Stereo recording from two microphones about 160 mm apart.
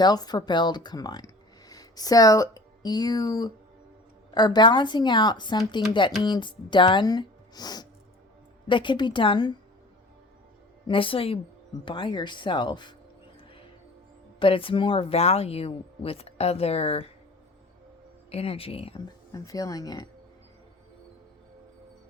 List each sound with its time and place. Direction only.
0.0 s speech: 25° left (ahead or behind)
10.8 s speech: 35° left (ahead or behind)
14.3 s speech: 35° left (ahead or behind)
18.3 s speech: 40° left (ahead or behind)
19.3 s speech: 20° left (ahead or behind)